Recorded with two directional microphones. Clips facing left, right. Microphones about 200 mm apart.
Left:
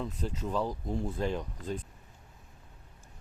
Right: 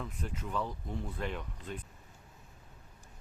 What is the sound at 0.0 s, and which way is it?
Speech, 30° left (ahead or behind).